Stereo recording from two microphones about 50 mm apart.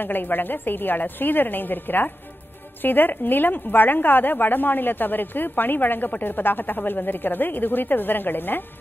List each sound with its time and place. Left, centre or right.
0.0 s a woman's voice: left